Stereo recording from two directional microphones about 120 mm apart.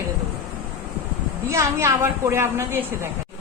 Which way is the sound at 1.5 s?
25° right (ahead or behind).